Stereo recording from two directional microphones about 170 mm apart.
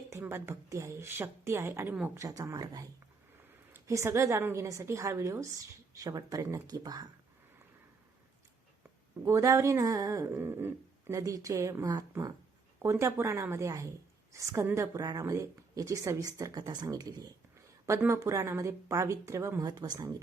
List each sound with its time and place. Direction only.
0.1 s a woman's voice: 15° right (ahead or behind)
9.2 s a woman's voice: 20° right (ahead or behind)